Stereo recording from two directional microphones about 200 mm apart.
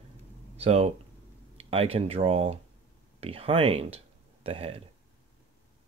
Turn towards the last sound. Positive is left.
turn(degrees=-30)  # may be behind; listen again after turning